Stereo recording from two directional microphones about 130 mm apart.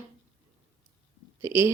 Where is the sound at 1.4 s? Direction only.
20° right (ahead or behind).